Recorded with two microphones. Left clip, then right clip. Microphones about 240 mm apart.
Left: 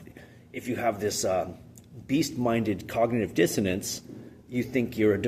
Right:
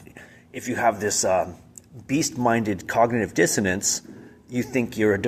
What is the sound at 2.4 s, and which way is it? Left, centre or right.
Speech, centre.